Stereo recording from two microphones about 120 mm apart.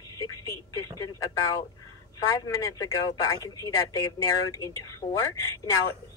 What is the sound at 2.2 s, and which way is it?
Speech, 30° left (ahead or behind).